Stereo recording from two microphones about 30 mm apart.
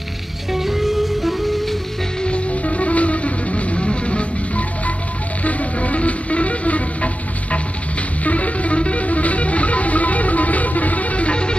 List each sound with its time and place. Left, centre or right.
0.5 s music: centre
2.2 s music: left
8.2 s music: left